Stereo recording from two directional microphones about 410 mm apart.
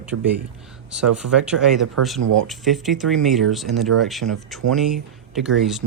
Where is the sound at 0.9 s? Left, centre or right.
Centre.